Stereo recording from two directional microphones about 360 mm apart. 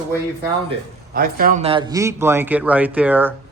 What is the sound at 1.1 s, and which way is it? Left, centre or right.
A man's voice, right.